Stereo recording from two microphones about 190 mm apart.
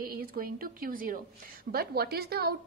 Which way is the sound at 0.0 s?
50° right (ahead or behind).